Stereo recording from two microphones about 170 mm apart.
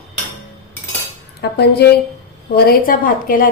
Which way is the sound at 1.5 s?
75° left (ahead or behind).